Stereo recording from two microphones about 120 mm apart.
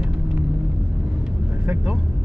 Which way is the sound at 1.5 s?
15° right (ahead or behind).